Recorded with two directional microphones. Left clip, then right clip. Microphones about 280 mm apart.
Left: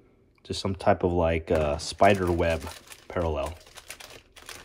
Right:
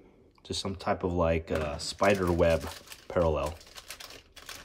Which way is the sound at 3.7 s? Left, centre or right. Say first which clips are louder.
Left 1 dB; left.